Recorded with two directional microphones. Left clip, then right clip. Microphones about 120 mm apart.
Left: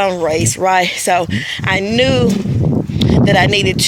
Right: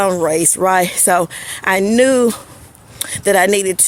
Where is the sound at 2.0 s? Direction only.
50° right (ahead or behind).